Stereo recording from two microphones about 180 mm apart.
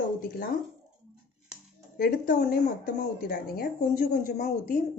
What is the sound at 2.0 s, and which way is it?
Speech, 50° left (ahead or behind).